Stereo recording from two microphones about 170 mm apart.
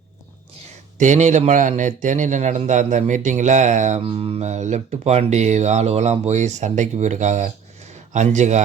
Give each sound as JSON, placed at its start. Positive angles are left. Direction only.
{"t": 0.9, "sound": "speech", "side_deg": -45}
{"t": 4.1, "sound": "speech", "side_deg": -35}